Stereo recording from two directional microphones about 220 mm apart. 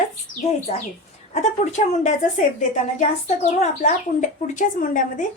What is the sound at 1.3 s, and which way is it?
Speech, 30° left (ahead or behind).